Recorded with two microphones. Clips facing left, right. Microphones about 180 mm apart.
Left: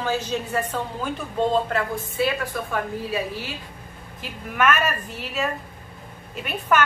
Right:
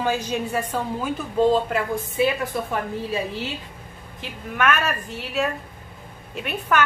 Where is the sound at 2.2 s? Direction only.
20° right (ahead or behind).